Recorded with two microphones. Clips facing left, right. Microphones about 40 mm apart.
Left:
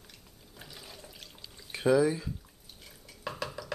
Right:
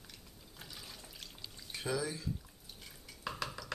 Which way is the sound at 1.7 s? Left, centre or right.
Left.